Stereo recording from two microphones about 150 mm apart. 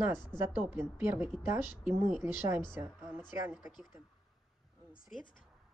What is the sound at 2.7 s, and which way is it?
Speech, 15° right (ahead or behind).